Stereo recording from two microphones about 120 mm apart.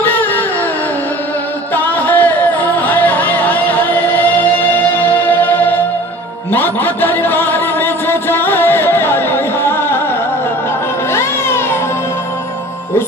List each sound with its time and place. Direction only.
0.0 s music: 15° left (ahead or behind)
1.8 s music: 15° left (ahead or behind)
11.1 s music: 20° left (ahead or behind)